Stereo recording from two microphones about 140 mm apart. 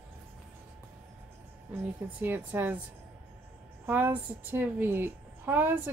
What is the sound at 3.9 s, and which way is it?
A woman's voice, 15° right (ahead or behind).